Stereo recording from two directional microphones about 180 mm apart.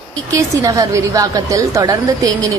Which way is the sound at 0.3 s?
15° right (ahead or behind).